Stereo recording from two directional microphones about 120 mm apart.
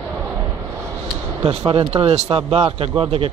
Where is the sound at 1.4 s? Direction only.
55° right (ahead or behind).